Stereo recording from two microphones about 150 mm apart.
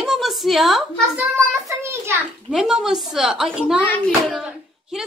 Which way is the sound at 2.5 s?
5° right (ahead or behind).